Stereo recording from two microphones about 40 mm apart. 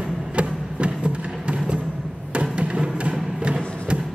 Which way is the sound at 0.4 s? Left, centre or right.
Right.